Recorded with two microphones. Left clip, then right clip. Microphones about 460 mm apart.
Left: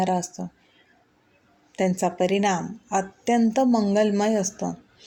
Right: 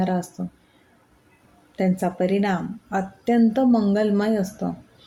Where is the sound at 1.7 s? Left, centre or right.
Right.